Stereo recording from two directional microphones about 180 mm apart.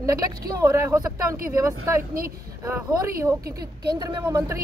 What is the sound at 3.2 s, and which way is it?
Speech, 55° right (ahead or behind).